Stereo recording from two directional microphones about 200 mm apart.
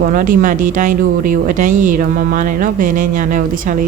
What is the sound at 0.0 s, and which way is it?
Speech, 45° right (ahead or behind).